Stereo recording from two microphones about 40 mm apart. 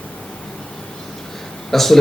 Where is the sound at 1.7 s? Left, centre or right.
Centre.